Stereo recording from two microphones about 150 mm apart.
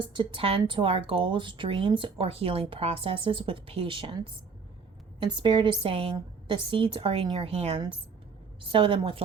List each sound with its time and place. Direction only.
0.0 s speech: 30° right (ahead or behind)